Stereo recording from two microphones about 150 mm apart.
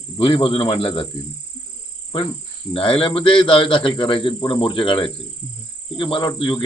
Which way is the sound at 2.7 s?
35° left (ahead or behind).